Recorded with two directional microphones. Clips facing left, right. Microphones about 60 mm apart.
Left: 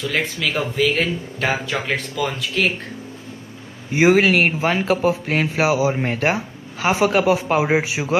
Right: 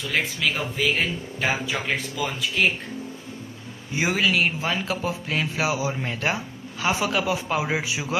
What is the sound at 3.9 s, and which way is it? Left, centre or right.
Speech, left.